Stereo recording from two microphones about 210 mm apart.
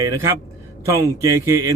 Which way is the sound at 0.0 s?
15° right (ahead or behind).